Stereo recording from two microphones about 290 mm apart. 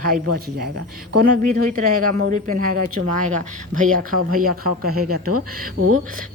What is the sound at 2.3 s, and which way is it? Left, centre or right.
Speech, right.